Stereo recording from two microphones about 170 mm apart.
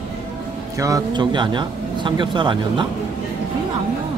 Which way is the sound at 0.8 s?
25° right (ahead or behind).